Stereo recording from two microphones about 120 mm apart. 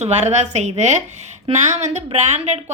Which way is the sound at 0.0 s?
70° right (ahead or behind).